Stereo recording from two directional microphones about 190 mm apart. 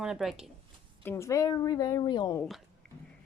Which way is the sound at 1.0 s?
15° left (ahead or behind).